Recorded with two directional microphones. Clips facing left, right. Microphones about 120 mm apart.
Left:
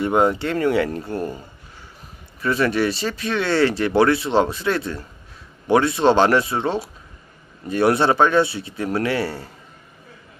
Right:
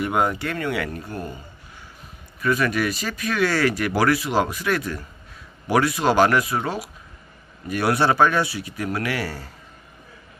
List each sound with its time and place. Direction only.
0.0 s speech: 25° left (ahead or behind)
2.4 s speech: 30° left (ahead or behind)